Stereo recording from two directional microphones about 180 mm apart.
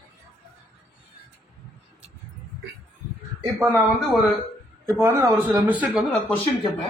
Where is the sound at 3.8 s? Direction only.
5° left (ahead or behind).